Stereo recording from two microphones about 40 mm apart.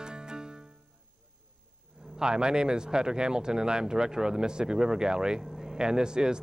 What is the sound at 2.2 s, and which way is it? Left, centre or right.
Speech, centre.